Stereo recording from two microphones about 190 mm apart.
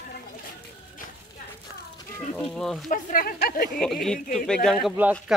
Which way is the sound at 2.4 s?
Centre (ahead or behind).